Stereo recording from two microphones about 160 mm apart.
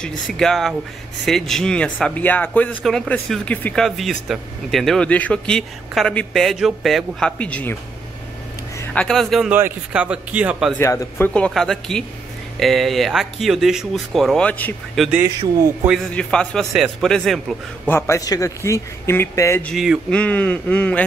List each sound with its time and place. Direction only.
0.0 s speech: 5° left (ahead or behind)
8.9 s speech: 5° left (ahead or behind)
9.5 s speech: 10° right (ahead or behind)
10.7 s speech: 15° left (ahead or behind)
15.0 s speech: 5° right (ahead or behind)
15.9 s speech: 5° left (ahead or behind)
17.8 s speech: 15° left (ahead or behind)
19.6 s speech: centre (ahead or behind)